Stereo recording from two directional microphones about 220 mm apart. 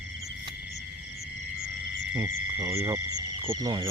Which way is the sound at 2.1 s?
10° right (ahead or behind).